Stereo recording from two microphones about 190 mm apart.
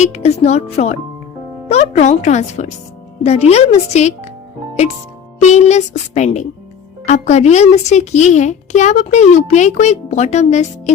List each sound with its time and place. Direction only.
0.0 s a child's voice: 35° left (ahead or behind)
5.4 s a child's voice: 35° left (ahead or behind)